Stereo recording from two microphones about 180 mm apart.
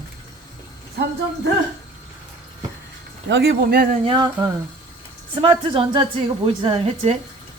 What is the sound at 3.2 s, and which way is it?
Speech, 70° right (ahead or behind).